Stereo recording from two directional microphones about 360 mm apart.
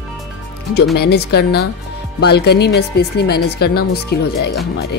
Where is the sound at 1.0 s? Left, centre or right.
Left.